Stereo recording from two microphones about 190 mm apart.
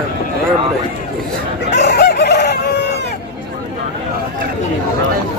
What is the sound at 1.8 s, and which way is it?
Crowing, 60° left (ahead or behind).